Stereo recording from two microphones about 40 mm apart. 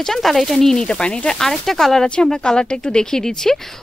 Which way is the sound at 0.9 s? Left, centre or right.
Left.